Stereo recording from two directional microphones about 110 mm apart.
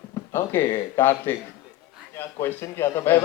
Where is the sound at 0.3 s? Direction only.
20° left (ahead or behind).